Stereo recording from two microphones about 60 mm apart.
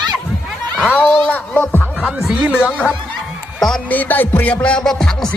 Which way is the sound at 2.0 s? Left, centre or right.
Centre.